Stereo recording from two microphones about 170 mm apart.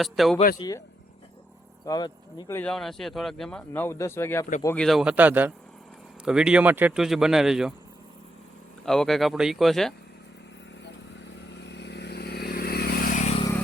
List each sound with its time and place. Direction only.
0.0 s speech: centre (ahead or behind)
1.8 s speech: 25° left (ahead or behind)
2.6 s speech: 5° left (ahead or behind)
3.7 s speech: 15° left (ahead or behind); by 7.7 s 5° right (ahead or behind)
8.9 s speech: centre (ahead or behind)
11.5 s vehicle: 90° left; by 13.2 s 55° left (ahead or behind)